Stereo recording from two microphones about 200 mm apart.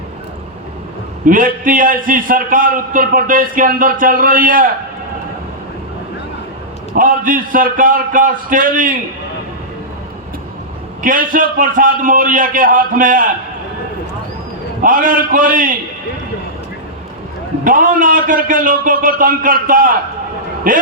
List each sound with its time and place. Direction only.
1.2 s a man's voice: 40° right (ahead or behind)
6.9 s a man's voice: 45° right (ahead or behind)
11.0 s a man's voice: 45° right (ahead or behind)
14.8 s a man's voice: 45° right (ahead or behind)
17.6 s a man's voice: 45° right (ahead or behind)